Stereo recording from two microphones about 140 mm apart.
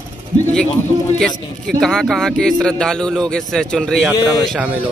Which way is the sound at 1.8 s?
5° left (ahead or behind).